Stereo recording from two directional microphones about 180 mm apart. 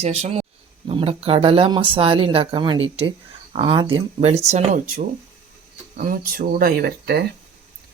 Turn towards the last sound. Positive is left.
turn(degrees=-65)  # may be behind; listen again after turning